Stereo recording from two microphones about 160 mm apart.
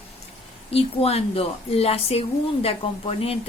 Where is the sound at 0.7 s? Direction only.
40° left (ahead or behind).